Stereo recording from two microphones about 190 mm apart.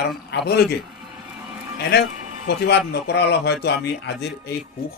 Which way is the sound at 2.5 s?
60° left (ahead or behind).